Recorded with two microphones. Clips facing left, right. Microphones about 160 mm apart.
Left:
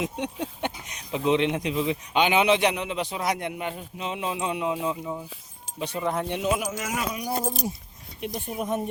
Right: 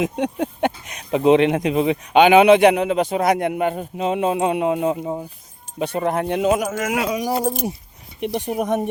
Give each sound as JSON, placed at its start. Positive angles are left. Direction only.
{"t": 0.0, "sound": "speech", "side_deg": -60}
{"t": 6.5, "sound": "speech", "side_deg": -50}
{"t": 8.2, "sound": "speech", "side_deg": -65}